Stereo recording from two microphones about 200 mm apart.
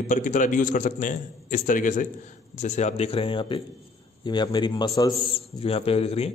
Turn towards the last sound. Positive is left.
turn(degrees=30)  # may be behind; listen again after turning